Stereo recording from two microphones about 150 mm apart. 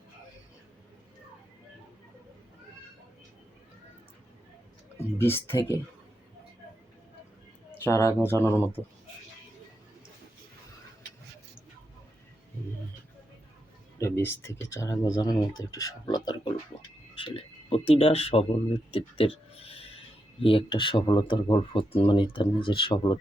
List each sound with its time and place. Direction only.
4.9 s speech: 15° left (ahead or behind)
7.7 s speech: 20° left (ahead or behind)
14.0 s speech: 15° left (ahead or behind); by 23.1 s 35° left (ahead or behind)